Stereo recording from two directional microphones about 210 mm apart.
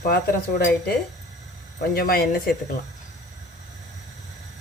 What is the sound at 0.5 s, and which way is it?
Speech, 50° left (ahead or behind).